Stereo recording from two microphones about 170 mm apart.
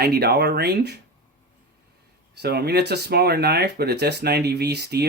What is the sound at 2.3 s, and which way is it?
Speech, 75° right (ahead or behind).